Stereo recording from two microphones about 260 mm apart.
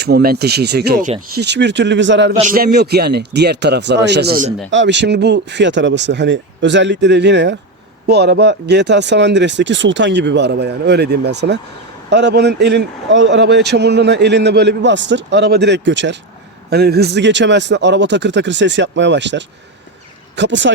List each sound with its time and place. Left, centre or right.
0.0 s speech: right
2.3 s speech: right